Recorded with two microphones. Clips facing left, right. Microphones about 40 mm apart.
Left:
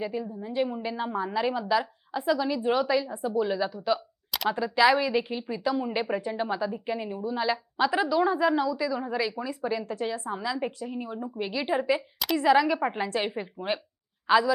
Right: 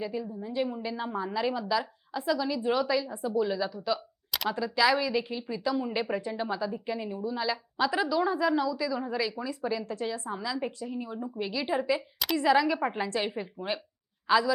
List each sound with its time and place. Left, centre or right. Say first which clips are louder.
0.0 s a woman's voice: left 2 dB; centre
9.8 s a woman's voice: left 2 dB; left
10.1 s a woman's voice: left 2 dB; centre